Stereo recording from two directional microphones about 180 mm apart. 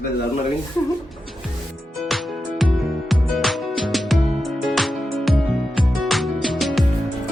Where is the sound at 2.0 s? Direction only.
Centre (ahead or behind).